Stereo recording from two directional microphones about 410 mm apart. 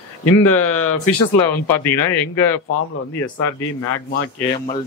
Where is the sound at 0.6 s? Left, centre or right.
Left.